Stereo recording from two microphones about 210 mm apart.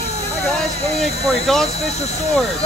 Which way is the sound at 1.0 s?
Centre (ahead or behind).